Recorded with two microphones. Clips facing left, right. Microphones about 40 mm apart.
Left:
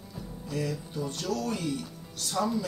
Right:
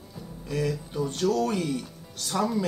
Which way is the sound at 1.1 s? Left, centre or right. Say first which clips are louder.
Right 8 dB; right.